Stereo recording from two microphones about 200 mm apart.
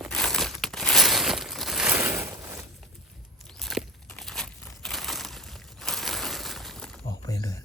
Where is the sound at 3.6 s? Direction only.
Centre (ahead or behind).